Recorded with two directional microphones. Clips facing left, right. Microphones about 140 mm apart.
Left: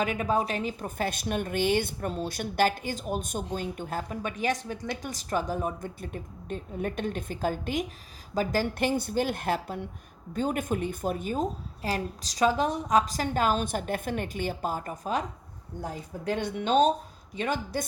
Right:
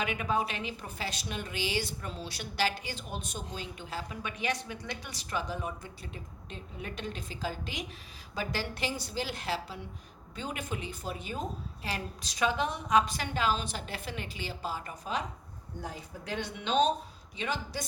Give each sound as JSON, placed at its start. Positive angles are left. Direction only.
{"t": 0.0, "sound": "a woman's voice", "side_deg": 40}